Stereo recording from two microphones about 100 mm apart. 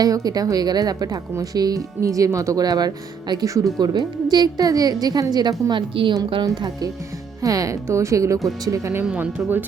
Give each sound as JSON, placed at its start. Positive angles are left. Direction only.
{"t": 0.0, "sound": "a woman's voice", "side_deg": -40}
{"t": 5.9, "sound": "a woman's voice", "side_deg": -60}
{"t": 6.4, "sound": "a woman's voice", "side_deg": -40}
{"t": 9.0, "sound": "speech", "side_deg": -15}